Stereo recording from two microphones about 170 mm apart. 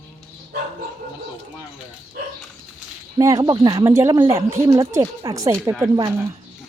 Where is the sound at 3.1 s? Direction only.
25° right (ahead or behind).